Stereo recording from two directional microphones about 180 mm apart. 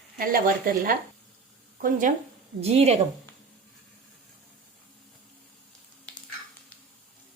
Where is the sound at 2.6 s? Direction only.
35° right (ahead or behind).